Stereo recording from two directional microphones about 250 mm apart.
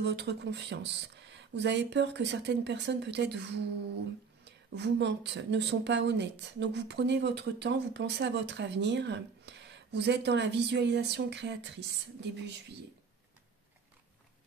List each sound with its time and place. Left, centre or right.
0.0 s speech: right